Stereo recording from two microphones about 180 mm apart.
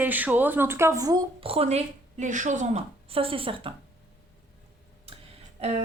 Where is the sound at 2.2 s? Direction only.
45° right (ahead or behind).